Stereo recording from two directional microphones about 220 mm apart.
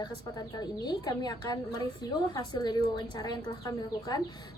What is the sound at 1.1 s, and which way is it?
A woman's voice, 20° left (ahead or behind).